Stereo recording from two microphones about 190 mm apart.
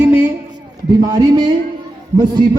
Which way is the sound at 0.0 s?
10° right (ahead or behind).